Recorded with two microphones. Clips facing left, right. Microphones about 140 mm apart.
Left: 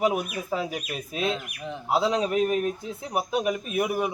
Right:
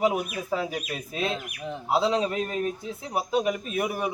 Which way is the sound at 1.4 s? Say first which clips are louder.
Right 1 dB; 5° right (ahead or behind).